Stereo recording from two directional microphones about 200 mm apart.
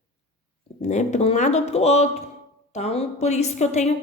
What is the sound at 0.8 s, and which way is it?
A woman's voice, 35° left (ahead or behind).